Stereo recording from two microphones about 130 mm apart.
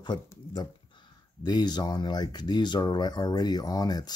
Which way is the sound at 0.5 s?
35° left (ahead or behind).